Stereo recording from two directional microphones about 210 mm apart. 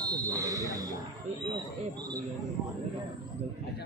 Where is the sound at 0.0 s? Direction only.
15° right (ahead or behind).